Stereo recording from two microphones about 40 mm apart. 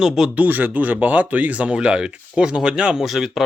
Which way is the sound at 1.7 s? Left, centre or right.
Right.